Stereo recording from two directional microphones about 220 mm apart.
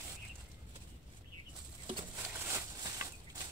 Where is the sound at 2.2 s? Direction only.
10° right (ahead or behind).